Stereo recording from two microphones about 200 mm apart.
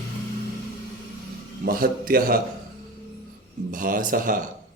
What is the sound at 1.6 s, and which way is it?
Speech, 45° right (ahead or behind).